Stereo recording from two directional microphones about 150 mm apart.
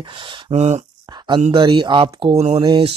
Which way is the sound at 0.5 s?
50° right (ahead or behind).